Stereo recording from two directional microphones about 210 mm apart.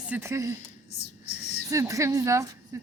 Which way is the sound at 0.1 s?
15° right (ahead or behind).